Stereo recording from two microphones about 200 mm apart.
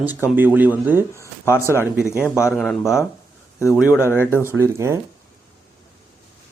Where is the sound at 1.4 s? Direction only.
15° left (ahead or behind).